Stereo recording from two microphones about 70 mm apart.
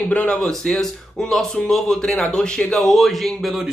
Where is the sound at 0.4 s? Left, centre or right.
Centre.